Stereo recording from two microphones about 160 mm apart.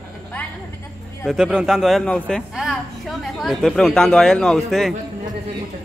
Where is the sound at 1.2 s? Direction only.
5° right (ahead or behind).